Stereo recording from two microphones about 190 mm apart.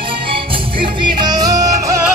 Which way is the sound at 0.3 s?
25° right (ahead or behind).